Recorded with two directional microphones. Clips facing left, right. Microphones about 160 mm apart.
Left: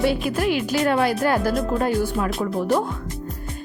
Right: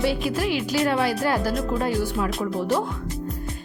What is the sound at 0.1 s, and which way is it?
A woman's voice, 50° left (ahead or behind).